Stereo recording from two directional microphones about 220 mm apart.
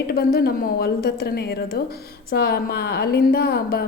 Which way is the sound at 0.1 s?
45° left (ahead or behind).